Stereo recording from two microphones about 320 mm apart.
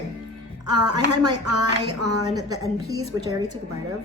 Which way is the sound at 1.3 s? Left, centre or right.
Right.